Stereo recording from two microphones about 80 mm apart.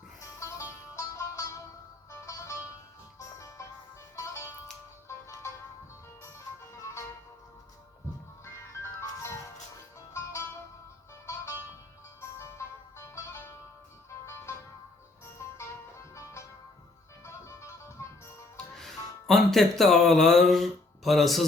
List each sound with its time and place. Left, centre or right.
0.2 s music: left
8.4 s music: left
18.8 s speech: centre